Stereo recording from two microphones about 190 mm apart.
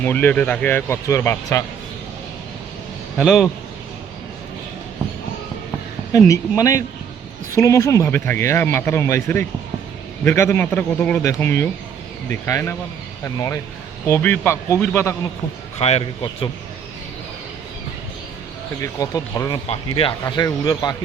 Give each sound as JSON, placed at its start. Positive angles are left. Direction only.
{"t": 0.0, "sound": "speech", "side_deg": 10}
{"t": 3.2, "sound": "a man's voice", "side_deg": 0}
{"t": 6.1, "sound": "speech", "side_deg": 15}
{"t": 15.8, "sound": "a man's voice", "side_deg": 30}
{"t": 18.8, "sound": "speech", "side_deg": 15}